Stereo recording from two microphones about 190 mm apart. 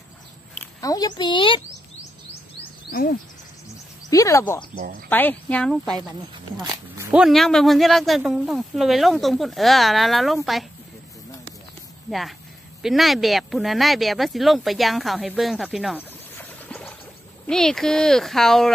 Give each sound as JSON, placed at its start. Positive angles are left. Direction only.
{"t": 0.7, "sound": "a child's voice", "side_deg": 20}
{"t": 2.9, "sound": "speech", "side_deg": 50}
{"t": 4.1, "sound": "speech", "side_deg": 15}
{"t": 6.5, "sound": "speech", "side_deg": -20}
{"t": 7.1, "sound": "speech", "side_deg": -5}
{"t": 12.1, "sound": "speech", "side_deg": 0}
{"t": 16.0, "sound": "frog", "side_deg": 10}
{"t": 17.5, "sound": "speech", "side_deg": 0}